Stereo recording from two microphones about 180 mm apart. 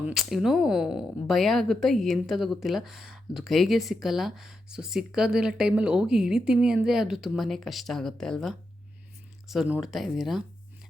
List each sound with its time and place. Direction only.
0.0 s speech: centre (ahead or behind)